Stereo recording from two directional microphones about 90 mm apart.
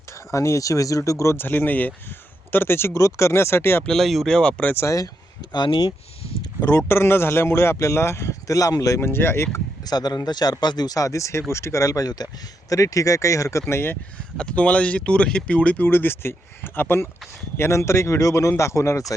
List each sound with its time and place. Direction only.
0.3 s speech: 35° left (ahead or behind)
3.8 s speech: 5° left (ahead or behind)
4.7 s speech: 35° left (ahead or behind)
5.5 s speech: 60° left (ahead or behind)
6.7 s speech: 30° left (ahead or behind)
9.0 s speech: 25° left (ahead or behind)
9.8 s speech: 50° left (ahead or behind); by 14.0 s 25° left (ahead or behind)
14.3 s speech: 15° left (ahead or behind); by 19.1 s 35° left (ahead or behind)